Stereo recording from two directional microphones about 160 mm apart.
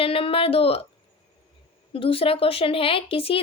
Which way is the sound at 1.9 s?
35° left (ahead or behind).